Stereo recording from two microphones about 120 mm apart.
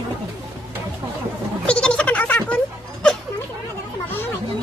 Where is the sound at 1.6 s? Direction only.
10° left (ahead or behind).